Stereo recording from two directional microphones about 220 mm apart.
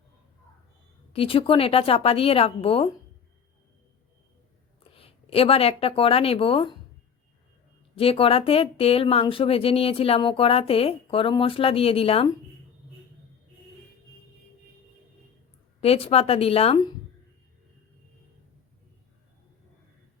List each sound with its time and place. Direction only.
1.1 s speech: 25° left (ahead or behind)
4.8 s speech: 25° left (ahead or behind)
7.9 s speech: 25° left (ahead or behind)
15.8 s speech: 25° left (ahead or behind)